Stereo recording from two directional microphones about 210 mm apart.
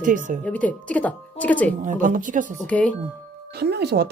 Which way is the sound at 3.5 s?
50° right (ahead or behind).